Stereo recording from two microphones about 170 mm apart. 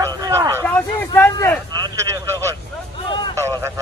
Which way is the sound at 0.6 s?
10° left (ahead or behind).